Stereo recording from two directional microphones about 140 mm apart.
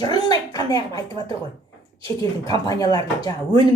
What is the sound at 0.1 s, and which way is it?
Speech, 25° left (ahead or behind).